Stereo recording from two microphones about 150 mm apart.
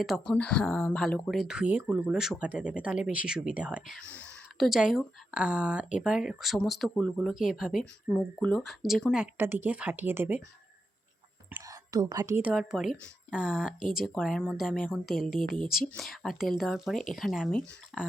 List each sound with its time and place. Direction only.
0.0 s speech: 5° left (ahead or behind)
3.9 s speech: 5° left (ahead or behind)
9.2 s a woman's voice: 15° right (ahead or behind)
11.5 s speech: 25° right (ahead or behind); by 15.4 s centre (ahead or behind)
15.5 s speech: 65° left (ahead or behind)
16.0 s speech: centre (ahead or behind)